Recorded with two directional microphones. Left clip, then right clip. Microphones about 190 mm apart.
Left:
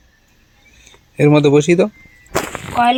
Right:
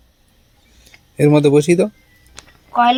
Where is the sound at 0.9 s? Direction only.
Centre (ahead or behind).